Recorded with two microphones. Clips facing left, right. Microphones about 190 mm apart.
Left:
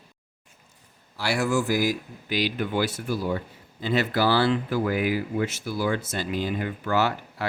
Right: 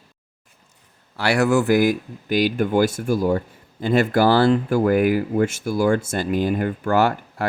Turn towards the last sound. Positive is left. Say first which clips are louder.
# right 6 dB
turn(degrees=-50)  # may be behind; listen again after turning